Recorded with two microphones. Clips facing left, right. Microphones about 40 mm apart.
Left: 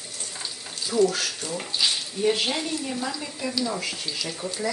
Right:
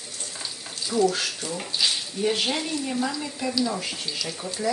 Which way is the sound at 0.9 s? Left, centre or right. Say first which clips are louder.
Left 1 dB; centre.